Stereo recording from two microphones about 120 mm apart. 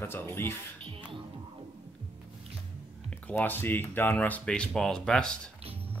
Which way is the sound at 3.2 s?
15° left (ahead or behind).